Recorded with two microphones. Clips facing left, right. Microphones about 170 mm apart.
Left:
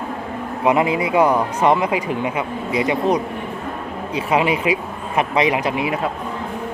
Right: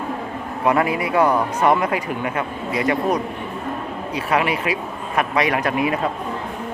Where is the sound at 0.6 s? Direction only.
20° left (ahead or behind).